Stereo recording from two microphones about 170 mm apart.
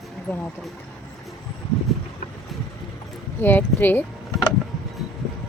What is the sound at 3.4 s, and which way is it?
Speech, 10° left (ahead or behind).